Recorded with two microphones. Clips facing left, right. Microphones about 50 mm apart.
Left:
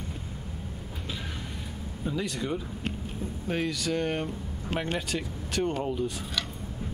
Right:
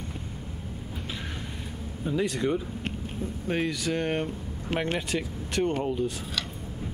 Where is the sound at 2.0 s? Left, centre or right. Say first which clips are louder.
Right 4 dB; centre.